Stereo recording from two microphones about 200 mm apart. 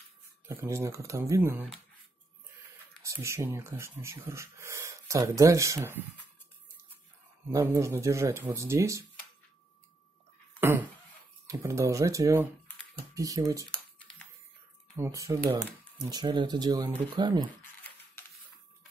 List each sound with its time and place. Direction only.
0.5 s speech: 10° right (ahead or behind)
3.0 s speech: 15° right (ahead or behind)
7.5 s speech: 15° right (ahead or behind)
10.6 s a sound: 10° right (ahead or behind)
11.4 s speech: 15° right (ahead or behind)
13.7 s typing: 5° left (ahead or behind)
15.0 s speech: 15° right (ahead or behind)